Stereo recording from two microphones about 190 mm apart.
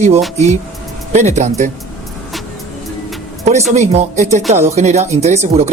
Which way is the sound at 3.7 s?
35° right (ahead or behind).